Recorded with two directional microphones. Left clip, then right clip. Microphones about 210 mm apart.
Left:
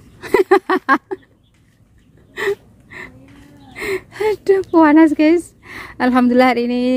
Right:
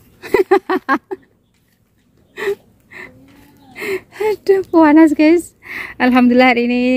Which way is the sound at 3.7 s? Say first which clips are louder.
Even; centre (ahead or behind).